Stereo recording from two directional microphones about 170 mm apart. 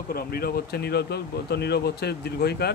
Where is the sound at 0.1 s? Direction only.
65° left (ahead or behind).